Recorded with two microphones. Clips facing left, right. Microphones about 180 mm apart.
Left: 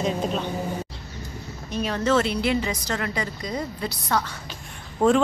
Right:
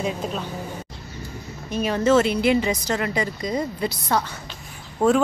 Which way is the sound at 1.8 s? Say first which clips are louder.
Right 4 dB; 5° right (ahead or behind).